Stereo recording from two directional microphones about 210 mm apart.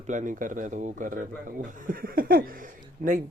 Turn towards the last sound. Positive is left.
turn(degrees=-35)  # may be behind; listen again after turning